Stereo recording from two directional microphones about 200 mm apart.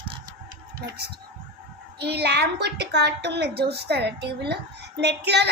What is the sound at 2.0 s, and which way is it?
A woman's voice, 55° right (ahead or behind).